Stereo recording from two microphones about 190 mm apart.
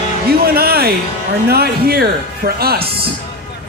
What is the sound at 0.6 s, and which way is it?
Music, 55° right (ahead or behind).